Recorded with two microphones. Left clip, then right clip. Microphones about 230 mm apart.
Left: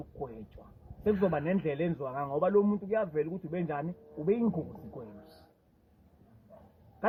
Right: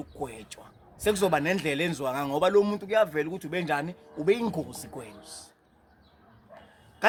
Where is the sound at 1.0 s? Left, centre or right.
Right.